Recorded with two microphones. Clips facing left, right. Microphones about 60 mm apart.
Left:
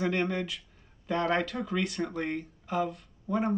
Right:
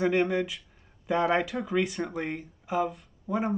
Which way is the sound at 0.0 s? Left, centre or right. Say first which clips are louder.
Right 4 dB; centre.